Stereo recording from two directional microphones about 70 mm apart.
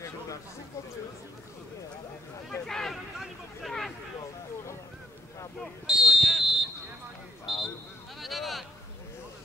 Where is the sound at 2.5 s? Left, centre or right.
Centre.